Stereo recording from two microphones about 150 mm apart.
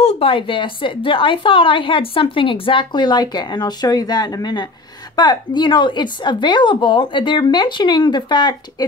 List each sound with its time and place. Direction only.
0.0 s a woman's voice: 40° left (ahead or behind)